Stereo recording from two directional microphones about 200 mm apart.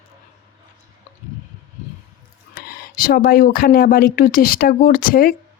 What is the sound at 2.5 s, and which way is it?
Speech, 50° left (ahead or behind).